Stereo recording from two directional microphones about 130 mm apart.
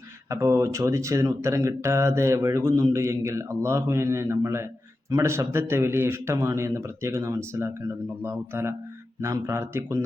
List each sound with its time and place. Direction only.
0.3 s speech: 20° right (ahead or behind)